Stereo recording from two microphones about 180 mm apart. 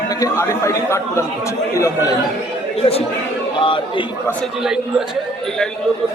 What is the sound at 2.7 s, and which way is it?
Speech, 35° left (ahead or behind).